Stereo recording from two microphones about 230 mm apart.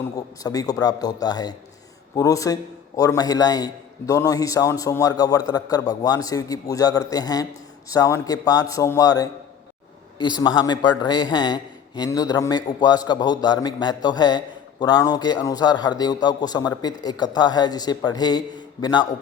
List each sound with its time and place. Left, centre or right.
0.2 s a man's voice: centre